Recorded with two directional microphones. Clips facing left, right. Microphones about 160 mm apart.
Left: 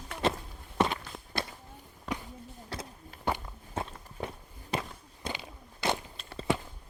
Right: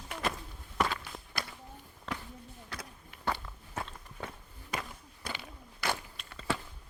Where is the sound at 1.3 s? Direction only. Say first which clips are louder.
Left 5 dB; 30° left (ahead or behind).